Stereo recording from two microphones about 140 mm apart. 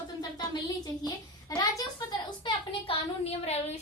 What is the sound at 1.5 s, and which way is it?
Speech, 25° left (ahead or behind).